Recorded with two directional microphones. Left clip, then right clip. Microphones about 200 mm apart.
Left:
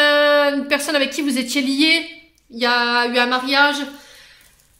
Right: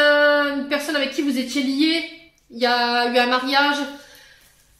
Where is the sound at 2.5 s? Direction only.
30° left (ahead or behind).